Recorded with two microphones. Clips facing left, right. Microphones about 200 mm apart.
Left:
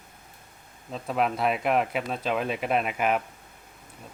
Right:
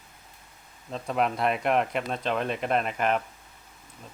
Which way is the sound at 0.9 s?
Centre (ahead or behind).